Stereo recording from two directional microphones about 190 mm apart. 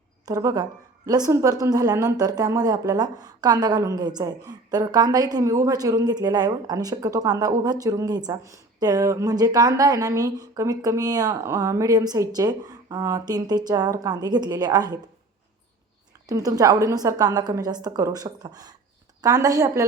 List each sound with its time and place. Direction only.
0.3 s speech: 20° right (ahead or behind)
16.2 s speech: 20° right (ahead or behind)